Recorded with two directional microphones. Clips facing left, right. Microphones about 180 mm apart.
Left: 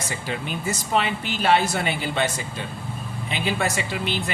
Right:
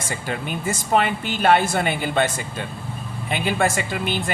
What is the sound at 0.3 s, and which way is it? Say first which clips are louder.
Speech: right 2 dB; 50° right (ahead or behind).